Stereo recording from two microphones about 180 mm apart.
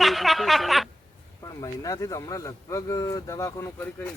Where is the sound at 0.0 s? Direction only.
Centre (ahead or behind).